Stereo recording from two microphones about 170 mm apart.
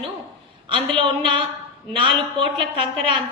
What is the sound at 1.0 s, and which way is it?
A woman's voice, 30° right (ahead or behind).